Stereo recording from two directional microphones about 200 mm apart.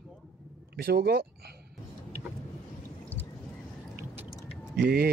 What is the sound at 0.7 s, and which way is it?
Speech, 50° right (ahead or behind).